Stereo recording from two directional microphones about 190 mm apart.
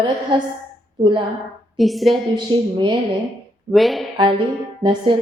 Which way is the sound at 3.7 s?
Centre (ahead or behind).